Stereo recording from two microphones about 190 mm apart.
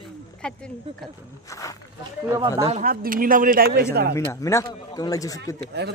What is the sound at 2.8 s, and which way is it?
Speech, 50° right (ahead or behind).